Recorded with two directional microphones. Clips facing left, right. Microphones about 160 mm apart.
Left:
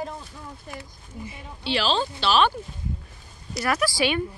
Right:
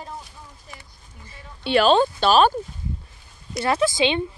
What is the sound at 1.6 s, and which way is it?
Speech, 55° right (ahead or behind).